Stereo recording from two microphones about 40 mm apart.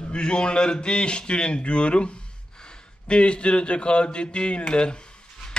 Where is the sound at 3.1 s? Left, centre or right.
Left.